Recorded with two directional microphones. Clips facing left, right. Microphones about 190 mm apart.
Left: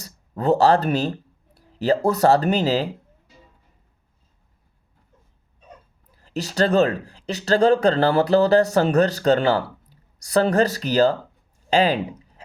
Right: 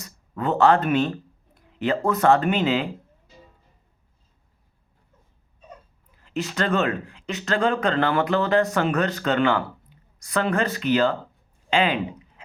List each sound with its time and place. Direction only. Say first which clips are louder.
0.0 s a sound: left 4 dB; 35° left (ahead or behind)
2.0 s speech: even; 35° left (ahead or behind)
6.1 s speech: right 1 dB; 35° left (ahead or behind)